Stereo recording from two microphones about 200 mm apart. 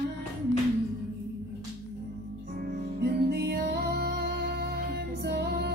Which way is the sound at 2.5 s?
50° right (ahead or behind).